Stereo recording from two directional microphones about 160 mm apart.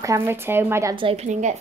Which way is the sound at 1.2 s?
45° right (ahead or behind).